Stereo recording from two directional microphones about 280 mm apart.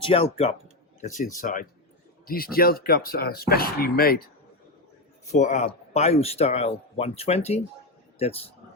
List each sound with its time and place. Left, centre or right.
0.0 s speech: centre
5.3 s speech: left